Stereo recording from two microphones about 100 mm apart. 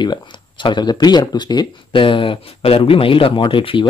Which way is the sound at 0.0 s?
50° left (ahead or behind).